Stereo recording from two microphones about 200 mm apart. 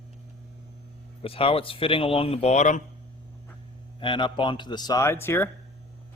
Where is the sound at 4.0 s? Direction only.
25° left (ahead or behind).